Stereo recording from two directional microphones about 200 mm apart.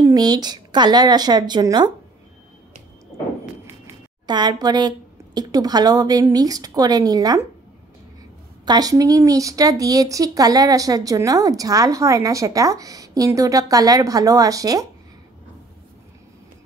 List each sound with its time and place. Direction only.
0.0 s speech: 20° right (ahead or behind)
3.8 s a woman's voice: 20° right (ahead or behind)
8.6 s speech: 20° right (ahead or behind)